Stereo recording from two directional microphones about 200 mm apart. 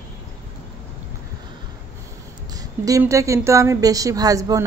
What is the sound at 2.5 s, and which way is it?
A woman's voice, 15° right (ahead or behind).